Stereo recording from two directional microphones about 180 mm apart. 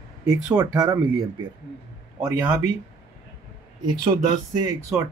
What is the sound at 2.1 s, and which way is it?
Speech, 15° right (ahead or behind).